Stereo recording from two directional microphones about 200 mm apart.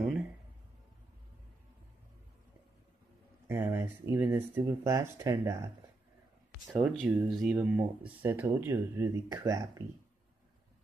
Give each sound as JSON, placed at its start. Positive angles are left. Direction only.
{"t": 3.4, "sound": "speech", "side_deg": -10}
{"t": 6.7, "sound": "speech", "side_deg": 0}